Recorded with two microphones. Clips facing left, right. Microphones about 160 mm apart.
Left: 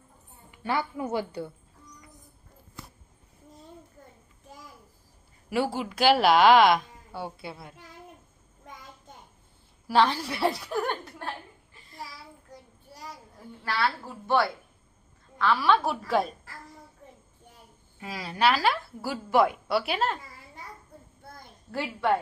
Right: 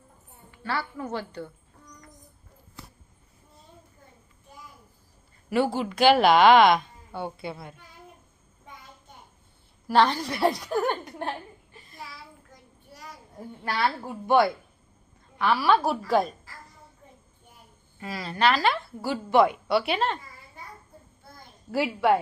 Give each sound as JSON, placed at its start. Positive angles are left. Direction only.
{"t": 0.6, "sound": "a woman's voice", "side_deg": 15}
{"t": 5.5, "sound": "a woman's voice", "side_deg": 5}
{"t": 9.9, "sound": "a woman's voice", "side_deg": 5}
{"t": 10.8, "sound": "a sound", "side_deg": -20}
{"t": 13.7, "sound": "a woman's voice", "side_deg": -20}
{"t": 18.0, "sound": "a woman's voice", "side_deg": 10}
{"t": 21.7, "sound": "a woman's voice", "side_deg": -5}